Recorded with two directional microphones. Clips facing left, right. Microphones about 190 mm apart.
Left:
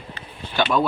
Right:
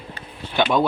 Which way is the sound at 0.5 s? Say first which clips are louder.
Right 1 dB; 20° right (ahead or behind).